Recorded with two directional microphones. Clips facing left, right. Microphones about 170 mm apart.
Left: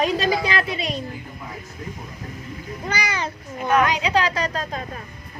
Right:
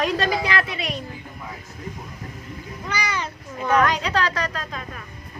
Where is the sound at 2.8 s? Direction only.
35° left (ahead or behind).